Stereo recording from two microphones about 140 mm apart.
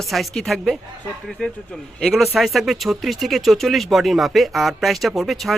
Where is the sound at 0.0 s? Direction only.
Centre (ahead or behind).